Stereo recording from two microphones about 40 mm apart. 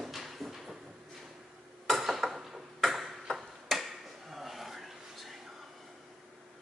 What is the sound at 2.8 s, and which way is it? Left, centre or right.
Tick-tock, centre.